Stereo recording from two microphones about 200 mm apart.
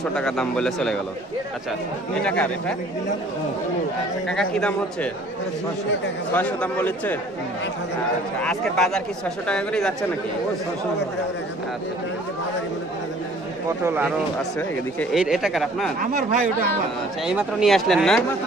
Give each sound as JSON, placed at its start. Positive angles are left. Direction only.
{"t": 0.1, "sound": "speech", "side_deg": 5}
{"t": 2.1, "sound": "speech", "side_deg": 5}
{"t": 4.3, "sound": "speech", "side_deg": 5}
{"t": 6.3, "sound": "a man's voice", "side_deg": 5}
{"t": 8.4, "sound": "speech", "side_deg": 5}
{"t": 13.8, "sound": "speech", "side_deg": -10}
{"t": 15.1, "sound": "speech", "side_deg": -5}
{"t": 16.0, "sound": "speech", "side_deg": -45}
{"t": 17.3, "sound": "speech", "side_deg": -5}